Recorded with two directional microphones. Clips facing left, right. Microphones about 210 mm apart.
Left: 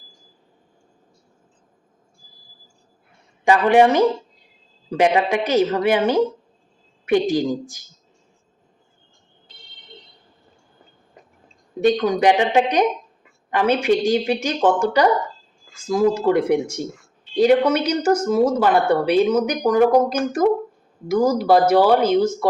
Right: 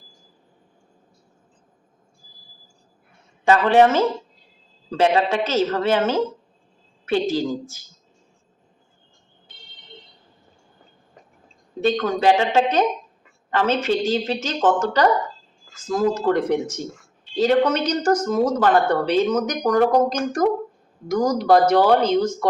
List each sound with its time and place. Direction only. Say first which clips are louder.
3.4 s speech: left 1 dB; 15° left (ahead or behind)
11.8 s speech: left 3 dB; 15° left (ahead or behind)